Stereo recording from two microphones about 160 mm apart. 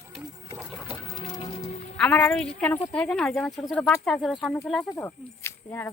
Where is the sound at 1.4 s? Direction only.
40° left (ahead or behind).